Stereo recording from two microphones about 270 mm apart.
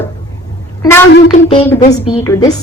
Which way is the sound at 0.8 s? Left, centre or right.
Centre.